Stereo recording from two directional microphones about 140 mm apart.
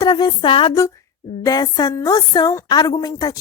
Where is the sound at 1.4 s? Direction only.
25° left (ahead or behind).